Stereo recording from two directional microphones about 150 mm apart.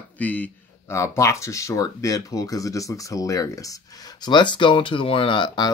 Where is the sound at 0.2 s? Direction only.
10° left (ahead or behind).